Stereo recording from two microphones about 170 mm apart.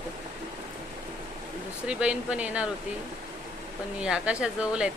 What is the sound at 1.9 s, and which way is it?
Speech, 5° right (ahead or behind).